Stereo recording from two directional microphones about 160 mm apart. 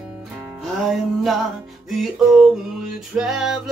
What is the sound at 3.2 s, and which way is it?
Music, 5° right (ahead or behind).